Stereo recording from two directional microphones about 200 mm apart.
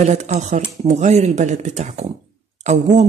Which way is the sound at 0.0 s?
35° right (ahead or behind).